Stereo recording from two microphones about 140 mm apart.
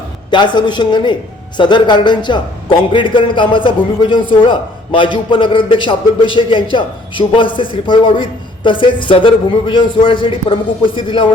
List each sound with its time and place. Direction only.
0.3 s a man's voice: 35° left (ahead or behind)